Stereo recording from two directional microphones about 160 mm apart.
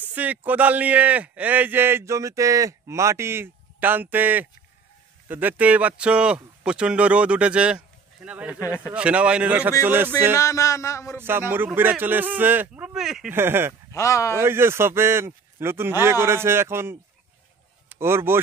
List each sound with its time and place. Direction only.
0.0 s speech: 10° right (ahead or behind)
8.5 s speech: 20° left (ahead or behind)
8.9 s speech: 5° right (ahead or behind)
10.3 s speech: 20° left (ahead or behind)
11.1 s speech: 15° right (ahead or behind)
13.3 s speech: 15° right (ahead or behind)
13.9 s speech: 20° left (ahead or behind)
14.3 s speech: 15° right (ahead or behind)